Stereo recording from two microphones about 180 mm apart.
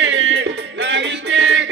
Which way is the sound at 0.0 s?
90° right.